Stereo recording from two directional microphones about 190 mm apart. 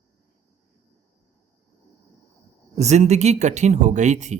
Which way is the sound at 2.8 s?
35° right (ahead or behind).